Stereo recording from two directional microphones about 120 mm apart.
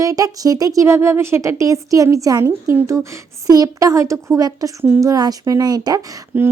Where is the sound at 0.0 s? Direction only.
30° right (ahead or behind).